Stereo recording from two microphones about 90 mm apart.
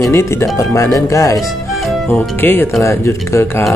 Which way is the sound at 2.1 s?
25° left (ahead or behind).